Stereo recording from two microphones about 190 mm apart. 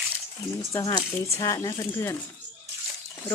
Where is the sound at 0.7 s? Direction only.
20° left (ahead or behind).